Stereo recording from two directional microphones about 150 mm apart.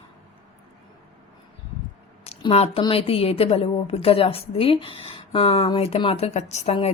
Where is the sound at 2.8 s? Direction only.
40° left (ahead or behind).